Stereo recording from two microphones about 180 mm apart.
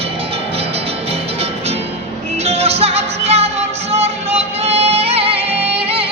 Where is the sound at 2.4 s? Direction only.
35° right (ahead or behind).